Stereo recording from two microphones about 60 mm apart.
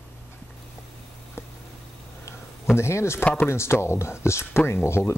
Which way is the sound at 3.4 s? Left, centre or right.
Left.